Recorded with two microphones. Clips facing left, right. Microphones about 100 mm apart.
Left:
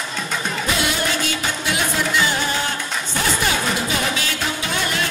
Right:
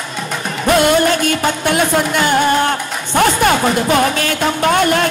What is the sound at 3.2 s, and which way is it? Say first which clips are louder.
Speech: right 10 dB; 55° right (ahead or behind).